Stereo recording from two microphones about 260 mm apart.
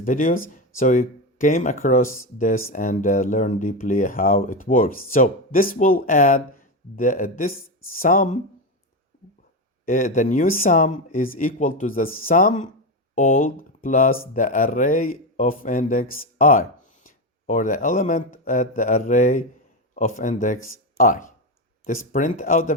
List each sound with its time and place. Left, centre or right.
0.0 s speech: left
9.8 s speech: left